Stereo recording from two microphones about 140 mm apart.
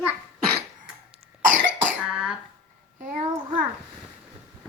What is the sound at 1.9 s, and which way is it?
Cough, 5° right (ahead or behind).